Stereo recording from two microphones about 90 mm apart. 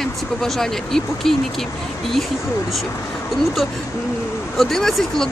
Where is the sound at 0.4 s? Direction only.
5° left (ahead or behind).